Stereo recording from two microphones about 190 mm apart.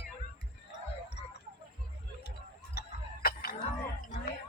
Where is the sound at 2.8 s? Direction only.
50° left (ahead or behind).